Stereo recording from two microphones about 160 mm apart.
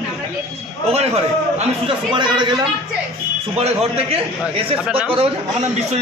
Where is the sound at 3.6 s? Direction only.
40° right (ahead or behind).